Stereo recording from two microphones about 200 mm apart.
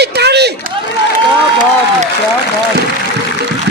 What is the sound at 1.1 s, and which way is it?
Applause, 40° right (ahead or behind).